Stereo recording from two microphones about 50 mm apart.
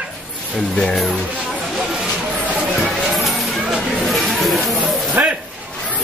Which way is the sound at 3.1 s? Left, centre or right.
Centre.